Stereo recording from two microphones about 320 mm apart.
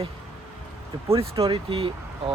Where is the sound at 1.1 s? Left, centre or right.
Centre.